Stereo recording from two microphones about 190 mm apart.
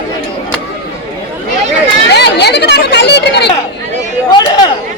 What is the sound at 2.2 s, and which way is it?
Chatter, 60° left (ahead or behind).